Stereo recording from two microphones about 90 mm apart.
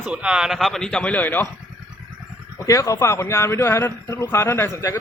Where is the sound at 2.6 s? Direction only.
35° left (ahead or behind).